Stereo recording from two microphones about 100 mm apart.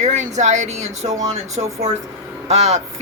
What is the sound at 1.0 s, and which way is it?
Speech, 90° right.